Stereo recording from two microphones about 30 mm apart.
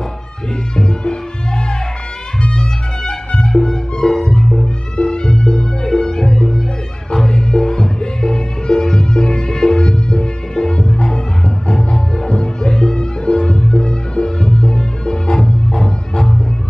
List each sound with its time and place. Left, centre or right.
0.7 s music: left
2.4 s music: left
11.7 s music: centre